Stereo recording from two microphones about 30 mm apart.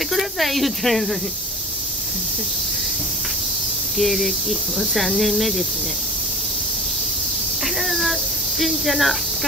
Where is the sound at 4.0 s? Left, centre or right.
Centre.